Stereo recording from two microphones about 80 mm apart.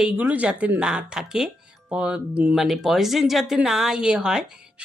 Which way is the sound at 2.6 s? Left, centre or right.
Centre.